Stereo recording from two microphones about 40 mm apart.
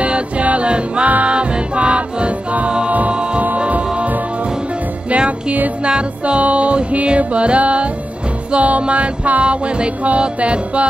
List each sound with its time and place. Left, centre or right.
0.0 s music: right
5.1 s music: right